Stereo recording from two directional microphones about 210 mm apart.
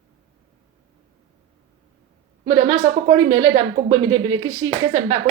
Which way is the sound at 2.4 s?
25° right (ahead or behind).